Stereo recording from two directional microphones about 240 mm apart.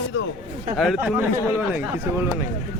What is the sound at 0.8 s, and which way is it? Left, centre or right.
A man's voice, centre.